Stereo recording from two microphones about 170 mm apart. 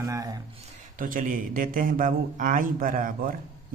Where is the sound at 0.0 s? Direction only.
20° right (ahead or behind).